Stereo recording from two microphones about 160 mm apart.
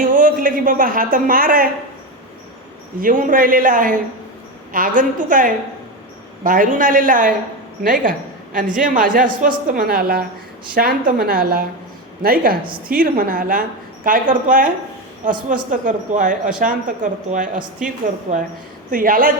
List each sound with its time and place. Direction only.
0.0 s a woman's voice: 60° right (ahead or behind)
3.0 s a woman's voice: 55° right (ahead or behind)